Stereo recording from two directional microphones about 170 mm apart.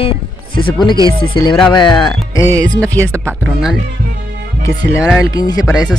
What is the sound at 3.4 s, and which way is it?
Speech, centre (ahead or behind).